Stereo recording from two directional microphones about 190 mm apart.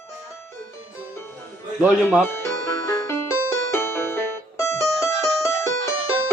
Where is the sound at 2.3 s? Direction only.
15° left (ahead or behind).